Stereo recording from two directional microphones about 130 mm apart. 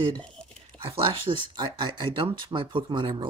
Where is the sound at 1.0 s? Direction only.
45° right (ahead or behind).